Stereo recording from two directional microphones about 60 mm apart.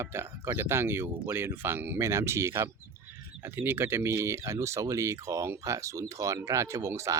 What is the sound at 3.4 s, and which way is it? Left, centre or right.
Speech, right.